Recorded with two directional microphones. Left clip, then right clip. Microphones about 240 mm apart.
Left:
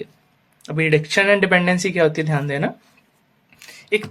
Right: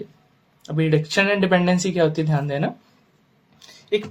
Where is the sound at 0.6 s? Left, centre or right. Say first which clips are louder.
Left 4 dB; left.